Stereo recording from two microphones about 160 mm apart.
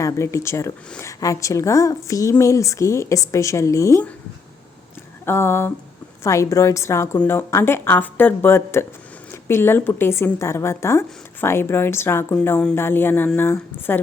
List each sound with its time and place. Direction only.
0.0 s a woman's voice: 20° left (ahead or behind)
5.2 s speech: 15° left (ahead or behind)